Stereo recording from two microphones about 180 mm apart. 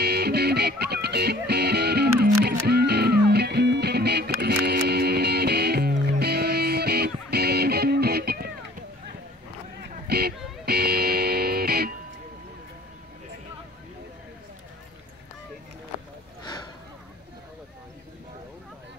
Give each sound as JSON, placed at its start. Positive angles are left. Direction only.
{"t": 0.0, "sound": "music", "side_deg": -65}
{"t": 10.0, "sound": "music", "side_deg": -60}